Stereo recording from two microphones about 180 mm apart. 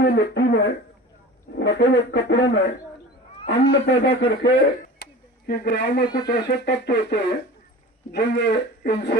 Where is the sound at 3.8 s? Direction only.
75° left (ahead or behind).